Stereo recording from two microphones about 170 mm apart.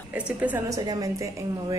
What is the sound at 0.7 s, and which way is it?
Speech, 20° right (ahead or behind).